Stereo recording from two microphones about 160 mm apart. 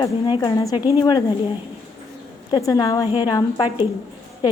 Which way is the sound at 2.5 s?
25° left (ahead or behind).